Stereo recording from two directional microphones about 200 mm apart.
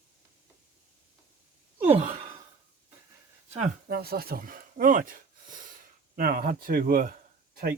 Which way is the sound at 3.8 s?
50° right (ahead or behind).